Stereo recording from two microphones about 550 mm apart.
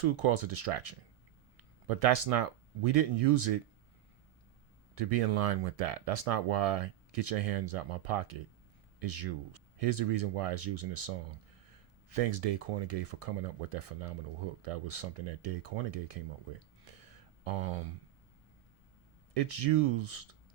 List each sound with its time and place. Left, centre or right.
0.0 s speech: right
4.9 s speech: right
19.3 s speech: right